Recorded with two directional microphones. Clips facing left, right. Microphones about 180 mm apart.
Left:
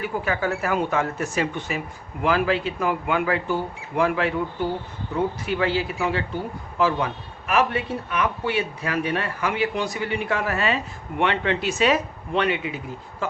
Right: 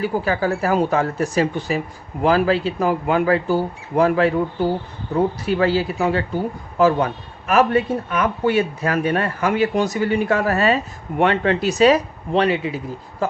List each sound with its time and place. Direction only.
0.0 s speech: 35° right (ahead or behind)